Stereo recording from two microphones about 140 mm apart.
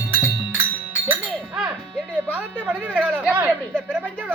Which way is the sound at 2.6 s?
10° right (ahead or behind).